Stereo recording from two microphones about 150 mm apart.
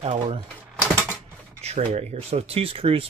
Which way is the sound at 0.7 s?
15° right (ahead or behind).